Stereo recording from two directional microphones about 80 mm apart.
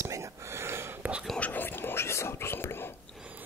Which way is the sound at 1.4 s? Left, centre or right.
Left.